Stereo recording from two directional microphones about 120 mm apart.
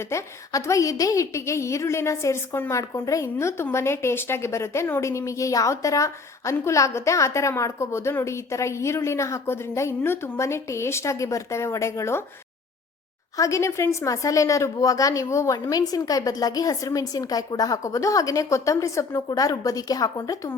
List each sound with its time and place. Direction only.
0.1 s a woman's voice: 25° left (ahead or behind)
13.3 s a woman's voice: 25° left (ahead or behind)